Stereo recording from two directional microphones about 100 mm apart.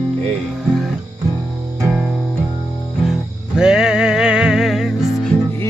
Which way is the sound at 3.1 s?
5° right (ahead or behind).